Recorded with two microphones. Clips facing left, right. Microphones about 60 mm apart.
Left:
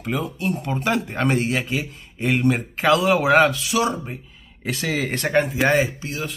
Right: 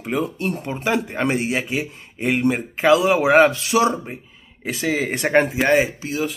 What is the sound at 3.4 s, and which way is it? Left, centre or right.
Speech, right.